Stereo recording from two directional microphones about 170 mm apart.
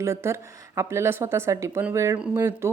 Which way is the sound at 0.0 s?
15° right (ahead or behind).